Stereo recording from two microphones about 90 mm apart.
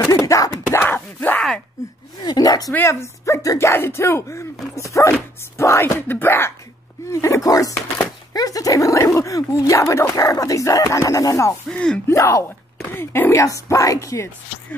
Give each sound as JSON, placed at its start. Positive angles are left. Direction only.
{"t": 0.0, "sound": "a sound", "side_deg": 40}
{"t": 0.7, "sound": "wail", "side_deg": 25}
{"t": 2.1, "sound": "a sound", "side_deg": 50}
{"t": 2.7, "sound": "speech", "side_deg": 30}
{"t": 7.1, "sound": "speech", "side_deg": 35}
{"t": 11.7, "sound": "speech", "side_deg": 10}
{"t": 12.1, "sound": "speech", "side_deg": 35}